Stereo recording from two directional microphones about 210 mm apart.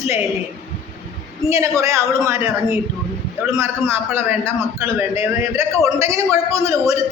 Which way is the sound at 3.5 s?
10° right (ahead or behind).